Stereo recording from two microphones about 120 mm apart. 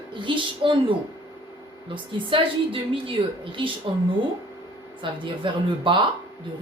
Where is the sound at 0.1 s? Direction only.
45° right (ahead or behind).